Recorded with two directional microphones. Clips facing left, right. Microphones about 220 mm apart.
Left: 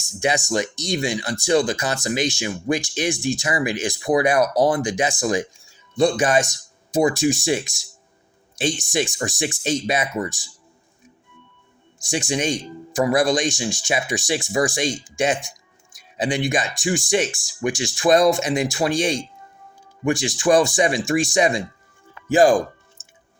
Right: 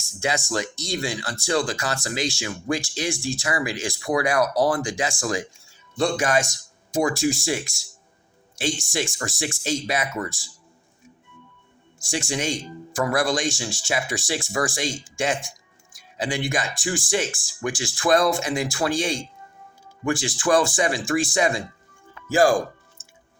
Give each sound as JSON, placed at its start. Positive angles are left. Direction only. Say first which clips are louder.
{"t": 0.0, "sound": "speech", "louder": "left 4 dB", "side_deg": 15}
{"t": 12.0, "sound": "speech", "louder": "left 4 dB", "side_deg": 20}